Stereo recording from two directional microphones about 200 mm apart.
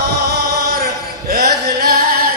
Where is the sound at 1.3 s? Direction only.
50° right (ahead or behind).